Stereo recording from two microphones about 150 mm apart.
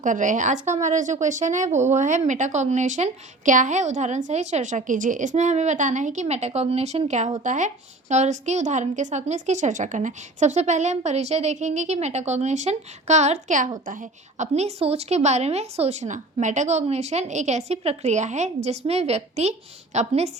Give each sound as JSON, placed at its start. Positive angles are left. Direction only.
{"t": 0.0, "sound": "a woman's voice", "side_deg": -60}